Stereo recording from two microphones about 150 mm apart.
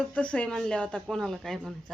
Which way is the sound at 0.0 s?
10° left (ahead or behind).